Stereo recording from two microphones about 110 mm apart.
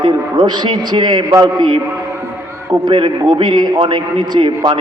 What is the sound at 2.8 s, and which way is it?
A man's voice, 45° right (ahead or behind).